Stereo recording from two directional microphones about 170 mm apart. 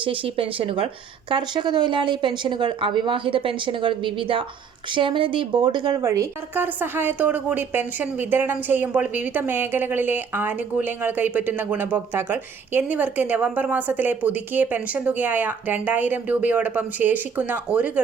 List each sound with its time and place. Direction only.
0.0 s speech: 30° right (ahead or behind)
6.0 s a woman's voice: 15° right (ahead or behind)